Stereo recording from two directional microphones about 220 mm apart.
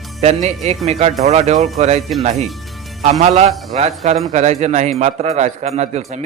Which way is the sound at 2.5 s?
Centre (ahead or behind).